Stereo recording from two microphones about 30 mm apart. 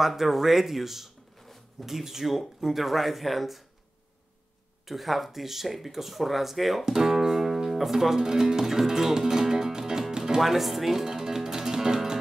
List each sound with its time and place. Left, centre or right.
0.0 s speech: centre
1.4 s zipper: centre
1.9 s speech: centre
4.8 s speech: centre
6.9 s speech: centre
8.2 s music: centre
10.5 s speech: centre
10.9 s music: centre